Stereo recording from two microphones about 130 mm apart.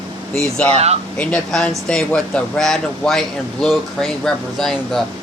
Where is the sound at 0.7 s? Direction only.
55° right (ahead or behind).